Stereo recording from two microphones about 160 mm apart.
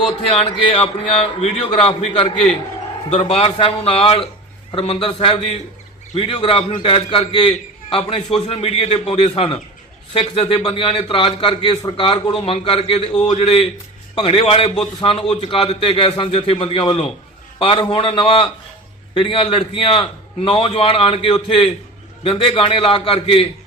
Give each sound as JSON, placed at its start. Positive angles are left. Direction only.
{"t": 0.3, "sound": "a man's voice", "side_deg": 35}
{"t": 1.7, "sound": "a man's voice", "side_deg": 30}
{"t": 2.0, "sound": "a man's voice", "side_deg": 40}